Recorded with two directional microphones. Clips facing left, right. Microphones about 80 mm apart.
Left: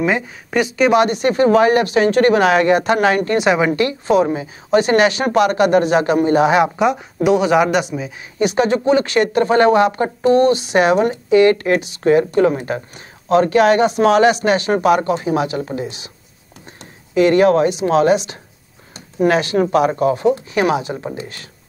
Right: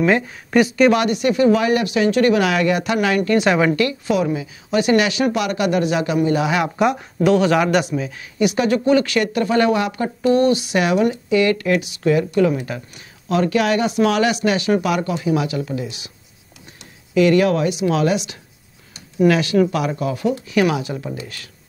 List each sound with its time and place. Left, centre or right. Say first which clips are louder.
0.0 s speech: right 1 dB; centre
0.9 s speech: left 3 dB; left
3.3 s a man's voice: left 1 dB; centre
3.7 s speech: left 4 dB; left
6.8 s speech: left 1 dB; centre
7.2 s a man's voice: left 2 dB; centre
8.4 s speech: left 2 dB; left
17.1 s speech: left 3 dB; left